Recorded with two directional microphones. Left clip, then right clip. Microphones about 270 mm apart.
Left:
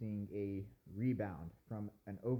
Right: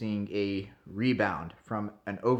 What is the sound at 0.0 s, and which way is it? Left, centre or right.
Speech, right.